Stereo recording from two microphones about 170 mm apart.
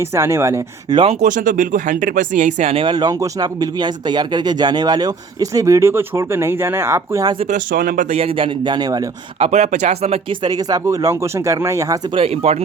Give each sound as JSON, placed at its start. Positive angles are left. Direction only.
{"t": 0.0, "sound": "speech", "side_deg": -15}
{"t": 0.9, "sound": "speech", "side_deg": -40}
{"t": 7.3, "sound": "speech", "side_deg": -45}
{"t": 8.1, "sound": "speech", "side_deg": -35}
{"t": 9.4, "sound": "speech", "side_deg": -40}
{"t": 12.1, "sound": "speech", "side_deg": -35}